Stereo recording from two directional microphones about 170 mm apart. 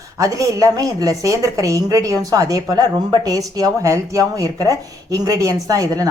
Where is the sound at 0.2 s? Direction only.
20° right (ahead or behind).